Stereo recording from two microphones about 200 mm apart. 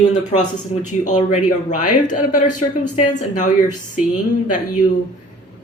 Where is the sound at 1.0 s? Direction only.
40° left (ahead or behind).